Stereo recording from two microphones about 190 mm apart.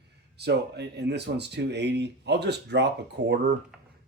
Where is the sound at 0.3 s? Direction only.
60° right (ahead or behind).